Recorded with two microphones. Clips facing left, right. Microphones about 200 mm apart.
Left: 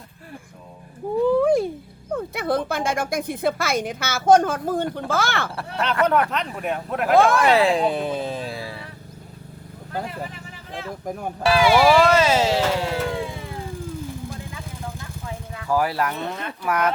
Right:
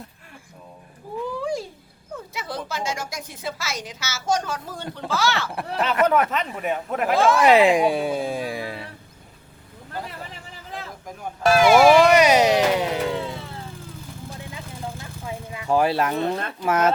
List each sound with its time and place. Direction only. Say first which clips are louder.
1.3 s a sound: left 10 dB; 55° left (ahead or behind)
2.1 s a woman's voice: left 9 dB; 55° left (ahead or behind)
5.5 s speech: right 2 dB; 20° right (ahead or behind)
6.3 s speech: even; centre (ahead or behind)
7.2 s a woman's voice: left 2 dB; 55° left (ahead or behind)
7.4 s speech: right 2 dB; 20° right (ahead or behind)
11.4 s speech: right 2 dB; 45° right (ahead or behind)
11.9 s speech: right 2 dB; 15° right (ahead or behind)
13.1 s music: even; 15° left (ahead or behind)
15.3 s speech: right 2 dB; 20° right (ahead or behind)